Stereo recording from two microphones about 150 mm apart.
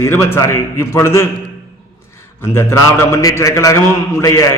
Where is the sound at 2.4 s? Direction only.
15° left (ahead or behind).